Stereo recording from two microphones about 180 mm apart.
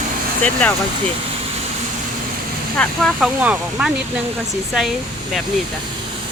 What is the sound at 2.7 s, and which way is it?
Speech, 5° left (ahead or behind).